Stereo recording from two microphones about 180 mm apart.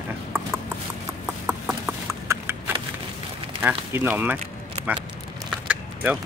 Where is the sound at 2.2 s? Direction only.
15° right (ahead or behind).